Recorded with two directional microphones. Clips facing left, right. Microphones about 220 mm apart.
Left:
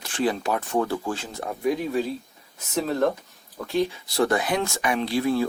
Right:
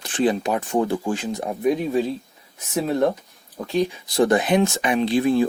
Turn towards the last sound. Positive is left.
turn(degrees=-20)  # may be behind; listen again after turning